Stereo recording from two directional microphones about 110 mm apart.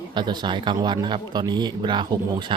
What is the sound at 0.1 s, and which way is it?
Speech, 45° right (ahead or behind).